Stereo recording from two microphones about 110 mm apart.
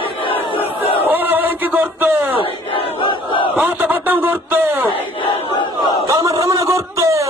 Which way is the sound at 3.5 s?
15° right (ahead or behind).